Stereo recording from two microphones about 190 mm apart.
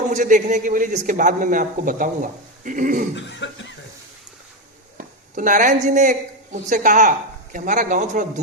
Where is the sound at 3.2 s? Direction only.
70° left (ahead or behind).